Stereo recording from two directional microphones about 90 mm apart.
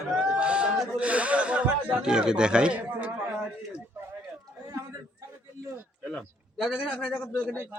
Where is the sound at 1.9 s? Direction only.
10° right (ahead or behind).